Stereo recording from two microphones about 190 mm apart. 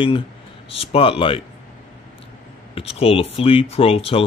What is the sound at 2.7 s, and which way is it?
Speech, 30° left (ahead or behind).